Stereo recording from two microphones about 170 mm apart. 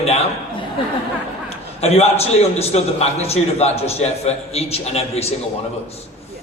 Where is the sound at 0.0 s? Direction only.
40° left (ahead or behind).